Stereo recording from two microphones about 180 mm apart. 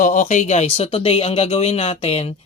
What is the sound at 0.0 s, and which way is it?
Speech, 45° left (ahead or behind).